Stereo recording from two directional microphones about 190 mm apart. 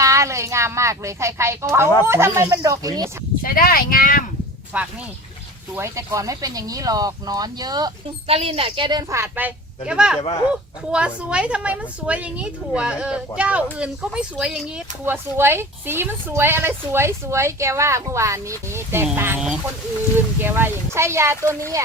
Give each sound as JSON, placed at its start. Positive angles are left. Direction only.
{"t": 0.0, "sound": "speech", "side_deg": -15}
{"t": 3.4, "sound": "speech", "side_deg": 50}
{"t": 4.7, "sound": "a woman's voice", "side_deg": -5}